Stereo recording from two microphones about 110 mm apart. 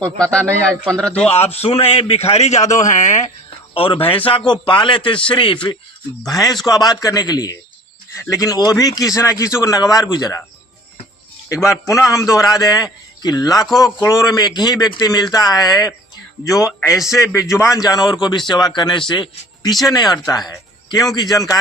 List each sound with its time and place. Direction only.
0.2 s speech: 10° left (ahead or behind)
1.3 s a man's voice: 70° left (ahead or behind); by 3.3 s 90° left
3.8 s speech: 55° left (ahead or behind)
6.4 s speech: centre (ahead or behind)
6.7 s a man's voice: 40° left (ahead or behind)
11.4 s a man's voice: 30° left (ahead or behind)
16.9 s speech: 5° right (ahead or behind)
17.7 s a man's voice: 35° left (ahead or behind)
20.5 s music: 35° left (ahead or behind)
21.2 s a man's voice: 35° left (ahead or behind)